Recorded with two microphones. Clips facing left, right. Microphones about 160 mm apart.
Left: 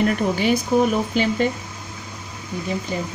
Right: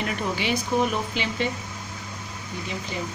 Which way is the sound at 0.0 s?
45° left (ahead or behind).